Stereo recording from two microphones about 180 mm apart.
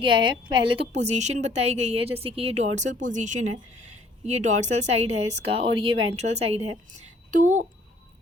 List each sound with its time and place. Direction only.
0.0 s a woman's voice: 25° right (ahead or behind); by 7.6 s 45° right (ahead or behind)